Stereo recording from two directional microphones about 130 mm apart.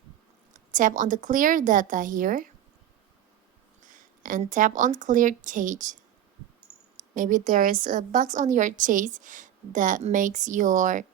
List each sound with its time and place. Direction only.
0.5 s a woman's voice: 85° right
4.2 s a woman's voice: 90° right
6.9 s a woman's voice: 90° right